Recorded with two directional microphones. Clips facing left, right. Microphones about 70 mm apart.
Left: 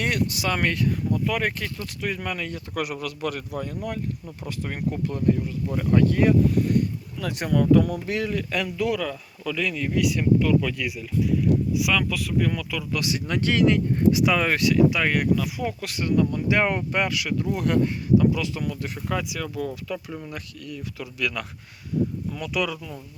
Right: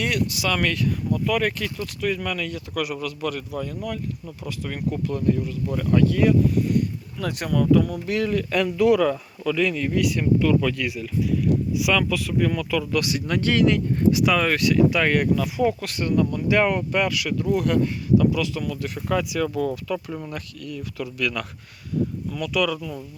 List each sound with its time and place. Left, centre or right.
0.0 s speech: left
2.8 s speech: left
4.9 s speech: left
6.0 s speech: left
7.3 s speech: left
7.7 s speech: left
8.0 s speech: left
8.3 s speech: centre
13.1 s speech: centre
15.8 s speech: centre
19.0 s speech: centre
22.3 s speech: left